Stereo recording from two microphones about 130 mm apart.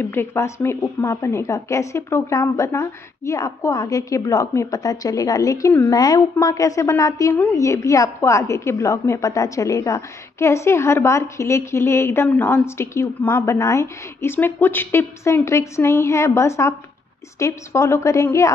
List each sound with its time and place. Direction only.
0.0 s a woman's voice: 15° left (ahead or behind)